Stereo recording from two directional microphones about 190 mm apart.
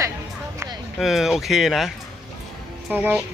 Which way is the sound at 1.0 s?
Centre (ahead or behind).